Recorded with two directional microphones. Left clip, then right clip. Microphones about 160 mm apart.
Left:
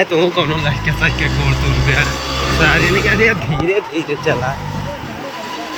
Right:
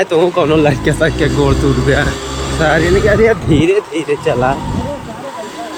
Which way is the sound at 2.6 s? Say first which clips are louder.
Right 3 dB; 30° right (ahead or behind).